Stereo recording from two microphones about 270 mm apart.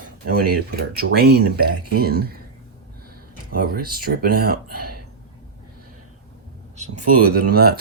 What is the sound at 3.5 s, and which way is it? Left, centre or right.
Speech, right.